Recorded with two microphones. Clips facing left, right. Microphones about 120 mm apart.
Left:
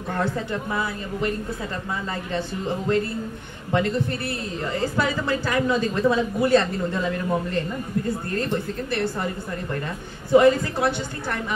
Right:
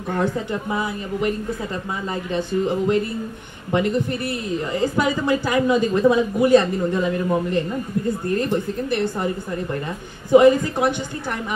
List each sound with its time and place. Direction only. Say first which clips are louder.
0.2 s a woman's voice: right 2 dB; 15° right (ahead or behind)
2.3 s a woman's voice: right 6 dB; 15° right (ahead or behind)